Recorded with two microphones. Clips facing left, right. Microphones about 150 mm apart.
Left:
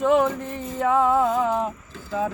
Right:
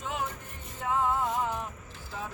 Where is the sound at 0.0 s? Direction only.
70° left (ahead or behind); by 1.2 s 90° left.